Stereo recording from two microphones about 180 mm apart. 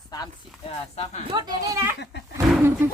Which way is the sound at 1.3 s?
20° right (ahead or behind).